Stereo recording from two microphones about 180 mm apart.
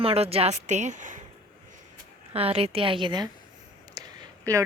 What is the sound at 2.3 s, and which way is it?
Speech, 35° right (ahead or behind).